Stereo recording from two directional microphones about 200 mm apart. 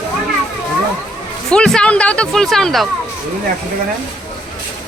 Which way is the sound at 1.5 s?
5° left (ahead or behind).